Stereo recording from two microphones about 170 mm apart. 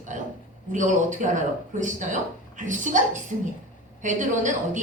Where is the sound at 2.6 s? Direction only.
50° right (ahead or behind).